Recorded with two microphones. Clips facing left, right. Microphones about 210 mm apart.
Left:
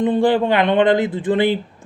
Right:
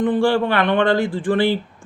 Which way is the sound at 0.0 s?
20° left (ahead or behind).